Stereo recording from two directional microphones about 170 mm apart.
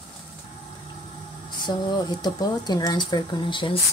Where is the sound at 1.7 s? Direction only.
25° left (ahead or behind).